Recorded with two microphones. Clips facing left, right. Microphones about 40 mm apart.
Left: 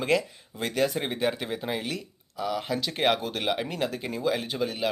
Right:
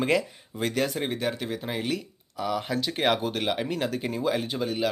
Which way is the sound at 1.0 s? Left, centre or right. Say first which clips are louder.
Left 1 dB; centre.